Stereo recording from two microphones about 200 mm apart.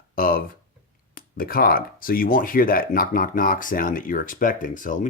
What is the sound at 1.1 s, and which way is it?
Speech, 45° left (ahead or behind).